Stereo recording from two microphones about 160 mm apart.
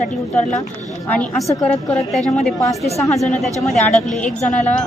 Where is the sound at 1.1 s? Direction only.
5° left (ahead or behind).